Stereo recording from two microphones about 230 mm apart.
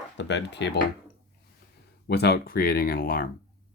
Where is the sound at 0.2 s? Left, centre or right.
Left.